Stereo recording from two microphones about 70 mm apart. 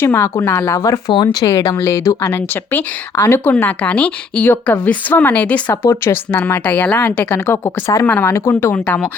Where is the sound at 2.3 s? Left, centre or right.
Left.